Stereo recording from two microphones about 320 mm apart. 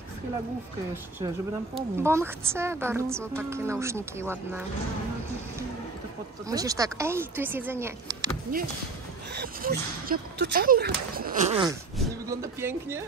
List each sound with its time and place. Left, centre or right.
1.8 s a woman's voice: centre
6.5 s a woman's voice: centre
8.5 s a woman's voice: right; by 13.0 s centre